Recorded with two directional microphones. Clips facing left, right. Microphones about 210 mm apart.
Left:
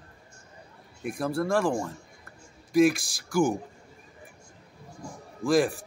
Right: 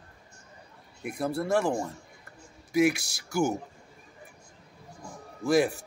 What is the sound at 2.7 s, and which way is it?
Speech, 65° right (ahead or behind).